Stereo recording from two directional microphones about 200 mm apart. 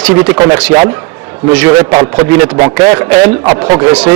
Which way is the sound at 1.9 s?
20° right (ahead or behind).